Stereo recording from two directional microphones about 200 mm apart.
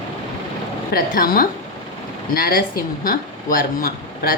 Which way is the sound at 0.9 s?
45° left (ahead or behind).